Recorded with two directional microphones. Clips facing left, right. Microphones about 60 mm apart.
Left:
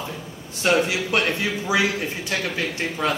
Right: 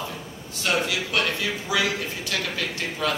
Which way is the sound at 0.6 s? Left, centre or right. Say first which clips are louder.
Left 5 dB; left.